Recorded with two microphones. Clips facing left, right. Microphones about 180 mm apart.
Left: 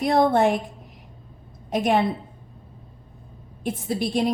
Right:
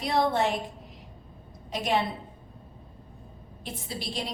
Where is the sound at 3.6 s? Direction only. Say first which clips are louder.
Left 12 dB; 50° left (ahead or behind).